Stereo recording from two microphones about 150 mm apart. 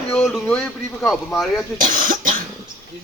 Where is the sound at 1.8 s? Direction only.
65° right (ahead or behind).